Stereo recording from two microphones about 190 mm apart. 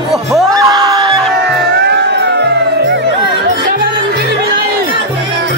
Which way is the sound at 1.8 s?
60° right (ahead or behind).